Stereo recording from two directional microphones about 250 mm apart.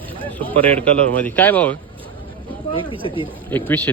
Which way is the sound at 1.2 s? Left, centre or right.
Centre.